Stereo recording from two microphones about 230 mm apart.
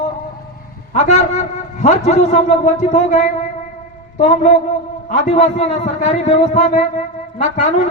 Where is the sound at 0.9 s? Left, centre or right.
Left.